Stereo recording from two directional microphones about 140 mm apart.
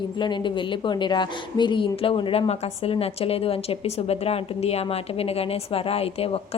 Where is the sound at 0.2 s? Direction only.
35° left (ahead or behind).